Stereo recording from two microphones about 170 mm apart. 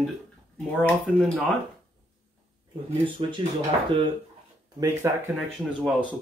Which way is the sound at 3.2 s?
35° right (ahead or behind).